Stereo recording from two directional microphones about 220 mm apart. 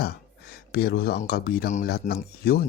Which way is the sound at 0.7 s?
45° left (ahead or behind).